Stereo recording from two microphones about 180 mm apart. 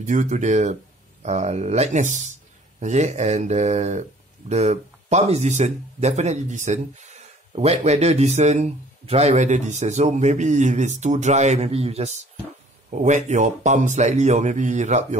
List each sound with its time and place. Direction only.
0.0 s speech: 45° right (ahead or behind)